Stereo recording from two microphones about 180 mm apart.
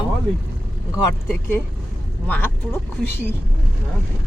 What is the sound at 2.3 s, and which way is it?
Speech, 10° left (ahead or behind).